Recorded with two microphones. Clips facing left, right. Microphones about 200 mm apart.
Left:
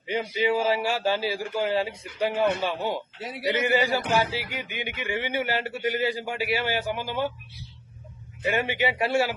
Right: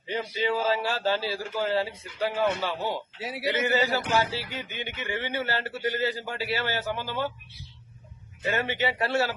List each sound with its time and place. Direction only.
0.3 s a man's voice: 10° left (ahead or behind)
3.2 s a man's voice: 5° right (ahead or behind)
3.5 s a man's voice: 15° left (ahead or behind)
8.4 s a man's voice: 15° left (ahead or behind)